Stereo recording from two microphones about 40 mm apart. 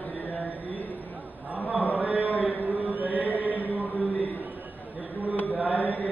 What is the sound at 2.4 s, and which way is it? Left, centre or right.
Chant, right.